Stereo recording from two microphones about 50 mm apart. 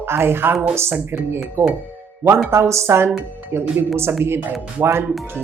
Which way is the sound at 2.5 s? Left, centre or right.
Right.